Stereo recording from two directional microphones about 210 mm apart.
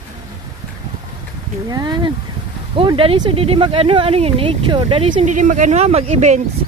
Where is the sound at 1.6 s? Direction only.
20° right (ahead or behind).